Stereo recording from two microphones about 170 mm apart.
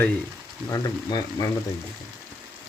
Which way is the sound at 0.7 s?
25° left (ahead or behind).